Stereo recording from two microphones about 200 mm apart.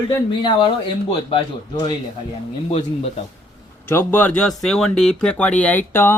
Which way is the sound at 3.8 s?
10° left (ahead or behind).